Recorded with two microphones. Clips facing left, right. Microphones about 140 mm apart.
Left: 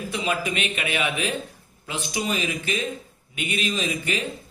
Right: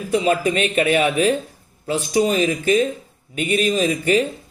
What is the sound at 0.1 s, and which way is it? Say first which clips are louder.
Speech: right 10 dB; 40° right (ahead or behind).